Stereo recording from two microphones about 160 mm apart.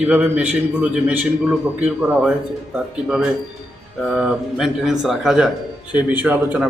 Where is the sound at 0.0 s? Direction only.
5° right (ahead or behind).